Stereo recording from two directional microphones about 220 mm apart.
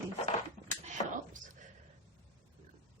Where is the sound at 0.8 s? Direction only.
35° right (ahead or behind).